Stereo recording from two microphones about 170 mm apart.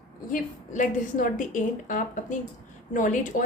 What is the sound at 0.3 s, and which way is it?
A woman's voice, 50° left (ahead or behind).